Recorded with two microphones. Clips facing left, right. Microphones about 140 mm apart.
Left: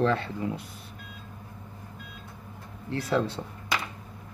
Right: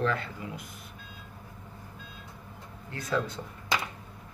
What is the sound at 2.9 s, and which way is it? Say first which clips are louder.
Speech: left 4 dB; 30° left (ahead or behind).